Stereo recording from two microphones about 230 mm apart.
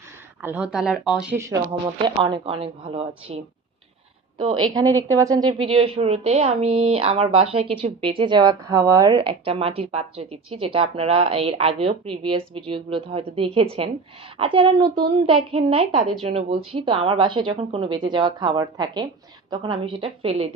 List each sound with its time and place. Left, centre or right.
0.4 s speech: centre
2.0 s a woman's voice: right
4.6 s a woman's voice: centre